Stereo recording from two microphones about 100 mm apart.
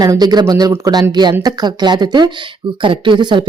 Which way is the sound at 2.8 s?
55° right (ahead or behind).